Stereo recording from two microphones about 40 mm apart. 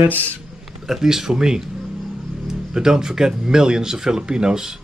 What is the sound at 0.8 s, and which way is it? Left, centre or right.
Speech, centre.